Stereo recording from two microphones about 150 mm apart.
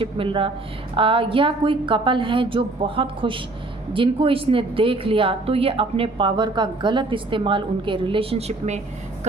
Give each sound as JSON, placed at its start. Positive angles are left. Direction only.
{"t": 0.0, "sound": "speech", "side_deg": -35}